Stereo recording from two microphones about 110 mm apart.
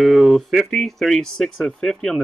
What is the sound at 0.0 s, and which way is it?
Speech, centre (ahead or behind).